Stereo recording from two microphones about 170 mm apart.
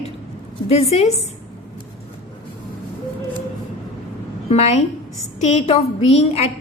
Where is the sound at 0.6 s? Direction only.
35° left (ahead or behind).